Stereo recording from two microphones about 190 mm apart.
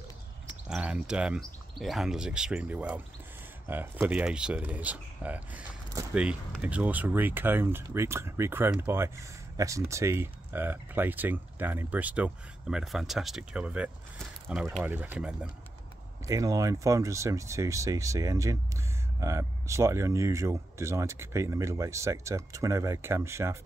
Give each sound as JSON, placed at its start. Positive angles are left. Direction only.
{"t": 0.5, "sound": "speech", "side_deg": -5}
{"t": 16.3, "sound": "speech", "side_deg": -15}